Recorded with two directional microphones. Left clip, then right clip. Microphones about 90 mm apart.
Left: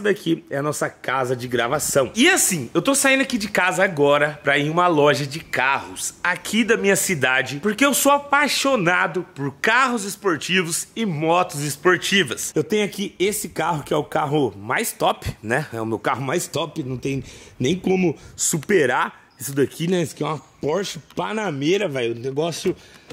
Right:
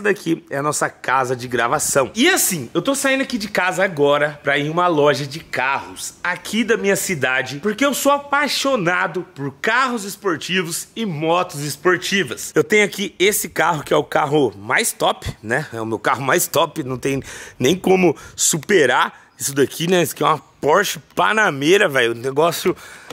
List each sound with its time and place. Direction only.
0.0 s speech: 5° right (ahead or behind)
12.5 s speech: 20° right (ahead or behind); by 16.2 s 5° right (ahead or behind)
16.2 s speech: 25° right (ahead or behind)
18.4 s speech: 10° right (ahead or behind); by 22.1 s 30° right (ahead or behind)
22.7 s speech: 50° left (ahead or behind)